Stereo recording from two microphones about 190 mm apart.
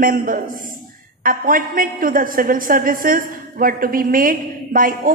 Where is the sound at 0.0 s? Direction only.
45° right (ahead or behind).